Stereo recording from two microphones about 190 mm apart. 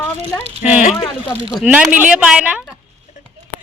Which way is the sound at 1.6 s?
5° right (ahead or behind).